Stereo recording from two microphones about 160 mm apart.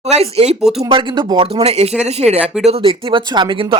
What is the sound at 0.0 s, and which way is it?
Speech, 40° right (ahead or behind).